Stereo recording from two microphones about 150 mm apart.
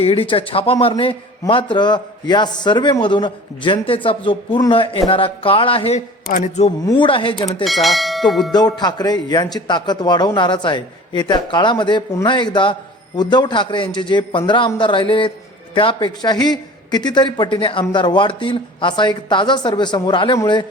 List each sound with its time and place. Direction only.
0.0 s a man's voice: 35° left (ahead or behind)
6.3 s speech: 50° left (ahead or behind)
6.8 s a man's voice: 35° left (ahead or behind)
7.6 s bell: centre (ahead or behind)
8.5 s a man's voice: 30° left (ahead or behind)